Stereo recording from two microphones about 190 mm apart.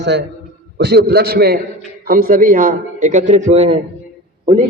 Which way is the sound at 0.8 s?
60° right (ahead or behind).